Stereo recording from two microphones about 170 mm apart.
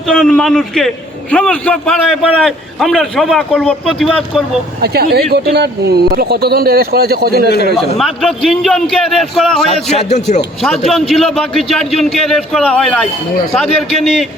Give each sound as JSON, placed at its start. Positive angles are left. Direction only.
{"t": 0.1, "sound": "a man's voice", "side_deg": 5}
{"t": 4.8, "sound": "speech", "side_deg": -70}
{"t": 7.9, "sound": "a man's voice", "side_deg": 0}
{"t": 9.9, "sound": "a man's voice", "side_deg": 40}
{"t": 10.6, "sound": "a man's voice", "side_deg": 0}